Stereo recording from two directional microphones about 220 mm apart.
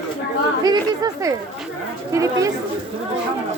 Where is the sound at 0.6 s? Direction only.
15° right (ahead or behind).